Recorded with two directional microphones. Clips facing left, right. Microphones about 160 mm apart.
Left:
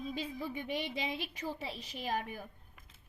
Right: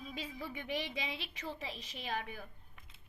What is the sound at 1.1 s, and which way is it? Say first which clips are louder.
A woman's voice: left 4 dB; 40° left (ahead or behind).